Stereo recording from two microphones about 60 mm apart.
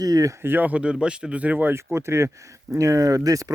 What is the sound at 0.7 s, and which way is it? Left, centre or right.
Speech, centre.